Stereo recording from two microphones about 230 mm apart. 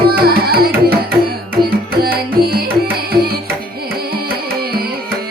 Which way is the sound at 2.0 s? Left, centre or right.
Right.